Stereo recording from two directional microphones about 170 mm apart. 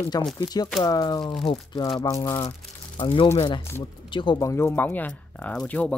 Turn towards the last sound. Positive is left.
turn(degrees=5)  # may be behind; listen again after turning